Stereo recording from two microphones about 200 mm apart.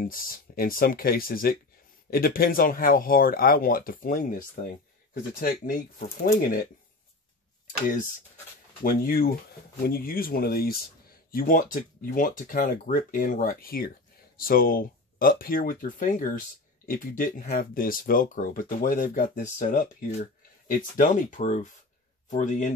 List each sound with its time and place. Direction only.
0.0 s speech: 45° left (ahead or behind)
8.8 s speech: 45° left (ahead or behind)